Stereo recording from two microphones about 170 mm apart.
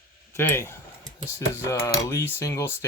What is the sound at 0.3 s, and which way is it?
Speech, 15° left (ahead or behind).